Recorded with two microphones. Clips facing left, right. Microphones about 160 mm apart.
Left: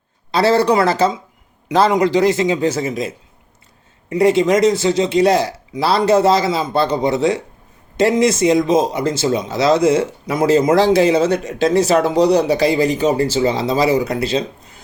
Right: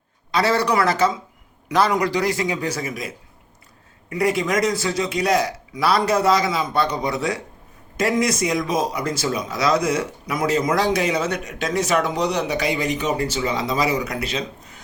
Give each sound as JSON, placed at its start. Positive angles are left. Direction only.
{"t": 0.3, "sound": "speech", "side_deg": 30}